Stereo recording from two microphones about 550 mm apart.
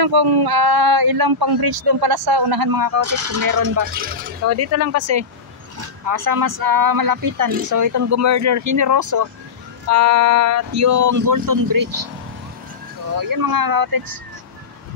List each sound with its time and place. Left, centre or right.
0.0 s speech: right
3.9 s speech: centre
4.5 s speech: right
13.1 s speech: right